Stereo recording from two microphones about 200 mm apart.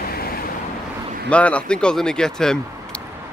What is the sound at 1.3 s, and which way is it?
Speech, 5° left (ahead or behind).